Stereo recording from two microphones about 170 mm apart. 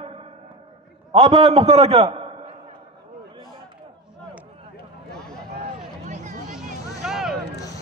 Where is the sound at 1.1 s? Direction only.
35° right (ahead or behind).